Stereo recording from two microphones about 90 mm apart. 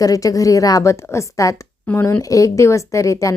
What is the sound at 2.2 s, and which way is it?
Speech, 40° left (ahead or behind).